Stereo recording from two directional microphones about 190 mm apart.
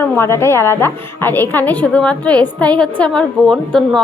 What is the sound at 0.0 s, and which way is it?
A woman's voice, 10° left (ahead or behind).